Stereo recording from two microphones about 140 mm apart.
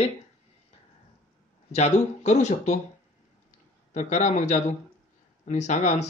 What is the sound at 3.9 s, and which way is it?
A man's voice, 55° left (ahead or behind).